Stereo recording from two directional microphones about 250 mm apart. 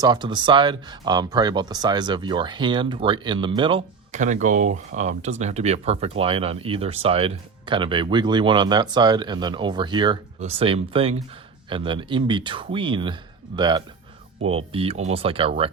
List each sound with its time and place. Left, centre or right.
0.0 s speech: centre